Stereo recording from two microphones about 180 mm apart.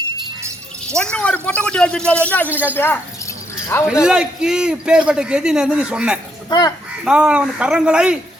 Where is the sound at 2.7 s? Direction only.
10° left (ahead or behind).